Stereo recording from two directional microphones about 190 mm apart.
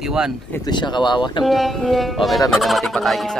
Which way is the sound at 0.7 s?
25° left (ahead or behind).